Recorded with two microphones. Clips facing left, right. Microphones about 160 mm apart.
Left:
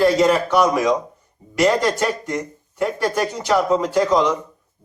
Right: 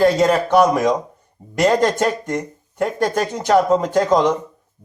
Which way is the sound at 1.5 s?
50° right (ahead or behind).